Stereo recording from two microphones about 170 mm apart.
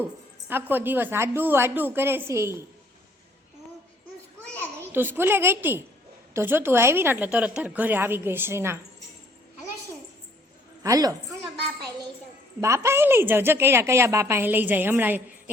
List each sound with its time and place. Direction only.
0.4 s a woman's voice: 10° right (ahead or behind)
4.9 s a woman's voice: 10° right (ahead or behind)
10.8 s a woman's voice: 20° right (ahead or behind)
12.5 s a woman's voice: 15° right (ahead or behind)